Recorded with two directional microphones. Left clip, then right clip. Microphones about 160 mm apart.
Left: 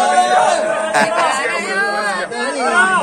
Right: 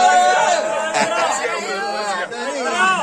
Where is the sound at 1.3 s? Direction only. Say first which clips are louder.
Left 4 dB; 20° right (ahead or behind).